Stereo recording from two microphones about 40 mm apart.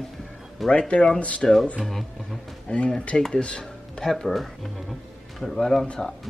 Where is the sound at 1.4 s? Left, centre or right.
Centre.